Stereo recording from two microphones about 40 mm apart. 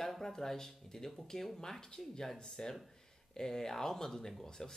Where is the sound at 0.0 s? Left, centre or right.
Centre.